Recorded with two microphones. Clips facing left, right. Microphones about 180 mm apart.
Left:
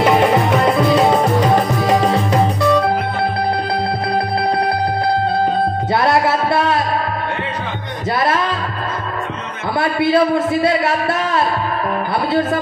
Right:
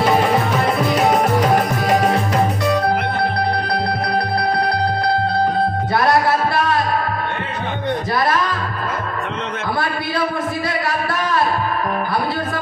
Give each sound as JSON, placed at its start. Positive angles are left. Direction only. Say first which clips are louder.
{"t": 1.5, "sound": "music", "louder": "left 2 dB", "side_deg": 25}
{"t": 9.8, "sound": "music", "louder": "left 10 dB", "side_deg": 25}